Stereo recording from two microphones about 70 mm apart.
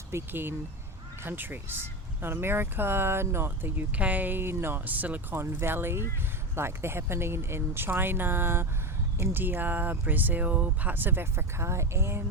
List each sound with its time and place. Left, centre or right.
0.1 s speech: right
3.9 s speech: right
5.4 s speech: right